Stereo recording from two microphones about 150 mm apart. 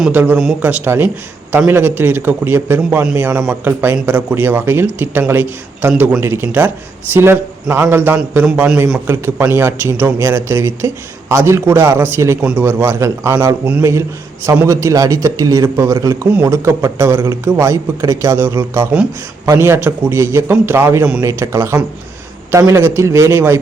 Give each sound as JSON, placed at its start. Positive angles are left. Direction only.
{"t": 0.1, "sound": "a man's voice", "side_deg": -10}